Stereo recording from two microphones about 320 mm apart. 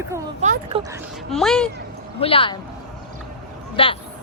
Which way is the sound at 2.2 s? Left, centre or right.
Centre.